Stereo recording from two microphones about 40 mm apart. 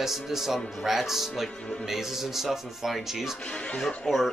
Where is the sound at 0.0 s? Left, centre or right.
Centre.